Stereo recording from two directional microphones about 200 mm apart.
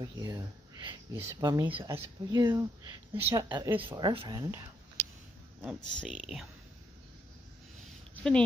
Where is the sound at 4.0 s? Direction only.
25° right (ahead or behind).